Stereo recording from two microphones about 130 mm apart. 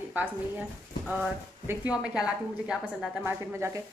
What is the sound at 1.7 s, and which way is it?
Speech, 10° right (ahead or behind).